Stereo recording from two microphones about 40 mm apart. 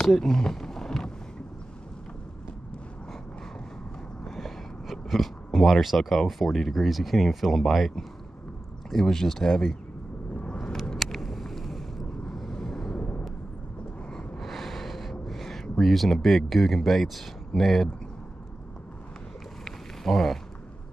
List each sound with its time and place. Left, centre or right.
0.1 s speech: centre
5.0 s a sound: centre
5.8 s speech: centre
8.9 s speech: centre
10.3 s vehicle: left
11.0 s a sound: centre
12.5 s vehicle: centre
14.4 s a sound: centre
15.8 s speech: centre
19.6 s boat: centre